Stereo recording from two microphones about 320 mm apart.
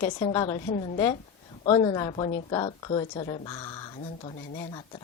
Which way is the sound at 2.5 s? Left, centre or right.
Centre.